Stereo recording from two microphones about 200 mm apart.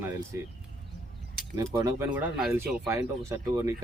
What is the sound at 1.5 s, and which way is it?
Speech, 15° right (ahead or behind).